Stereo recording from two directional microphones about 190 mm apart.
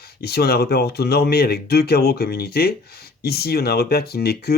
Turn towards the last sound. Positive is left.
turn(degrees=55)  # may be behind; listen again after turning